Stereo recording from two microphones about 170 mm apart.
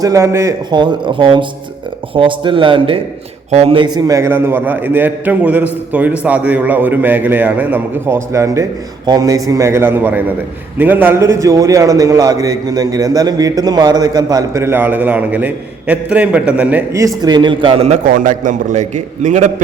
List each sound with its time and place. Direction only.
0.0 s a man's voice: 20° right (ahead or behind); by 18.0 s 40° right (ahead or behind)
18.1 s a man's voice: 50° right (ahead or behind)